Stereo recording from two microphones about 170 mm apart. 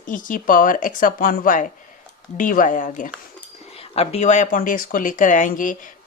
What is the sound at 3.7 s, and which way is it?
Speech, 35° left (ahead or behind).